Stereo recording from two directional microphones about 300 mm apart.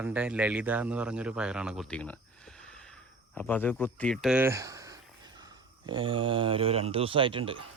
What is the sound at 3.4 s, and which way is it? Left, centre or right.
Speech, centre.